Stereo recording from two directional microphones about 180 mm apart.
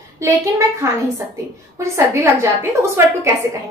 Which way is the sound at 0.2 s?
15° right (ahead or behind).